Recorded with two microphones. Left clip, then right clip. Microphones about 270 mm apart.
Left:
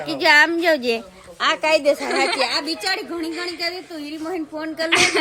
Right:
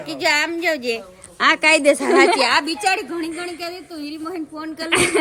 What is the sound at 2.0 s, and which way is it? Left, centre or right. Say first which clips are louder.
A woman's voice: right 6 dB; centre.